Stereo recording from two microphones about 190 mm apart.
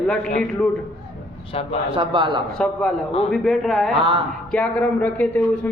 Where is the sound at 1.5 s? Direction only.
30° left (ahead or behind).